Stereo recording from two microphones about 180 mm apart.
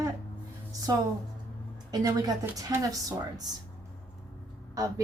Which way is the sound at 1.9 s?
20° right (ahead or behind).